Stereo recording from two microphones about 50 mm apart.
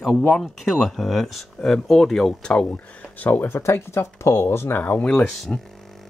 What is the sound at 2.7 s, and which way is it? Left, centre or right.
Speech, left.